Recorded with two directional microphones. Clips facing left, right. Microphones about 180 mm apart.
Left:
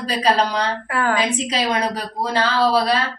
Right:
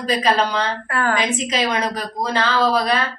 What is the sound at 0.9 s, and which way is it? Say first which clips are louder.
Speech: left 1 dB; 10° left (ahead or behind).